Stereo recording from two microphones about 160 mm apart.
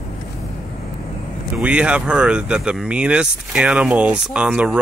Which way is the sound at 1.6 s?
5° right (ahead or behind).